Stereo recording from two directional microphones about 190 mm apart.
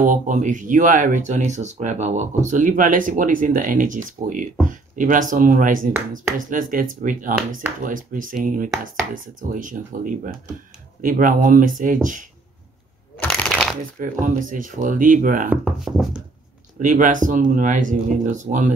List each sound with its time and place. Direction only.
0.0 s speech: 45° right (ahead or behind)
13.2 s shuffling cards: 5° left (ahead or behind)
13.9 s speech: 45° right (ahead or behind)
15.5 s speech: 5° right (ahead or behind)
16.8 s speech: 45° right (ahead or behind)